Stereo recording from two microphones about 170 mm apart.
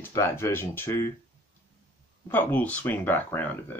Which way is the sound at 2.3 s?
10° left (ahead or behind).